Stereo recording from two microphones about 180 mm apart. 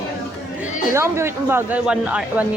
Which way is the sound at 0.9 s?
15° right (ahead or behind).